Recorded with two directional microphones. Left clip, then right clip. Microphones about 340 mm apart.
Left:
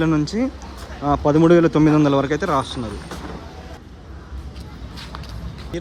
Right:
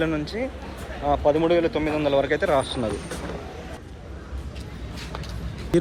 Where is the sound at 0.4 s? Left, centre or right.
Centre.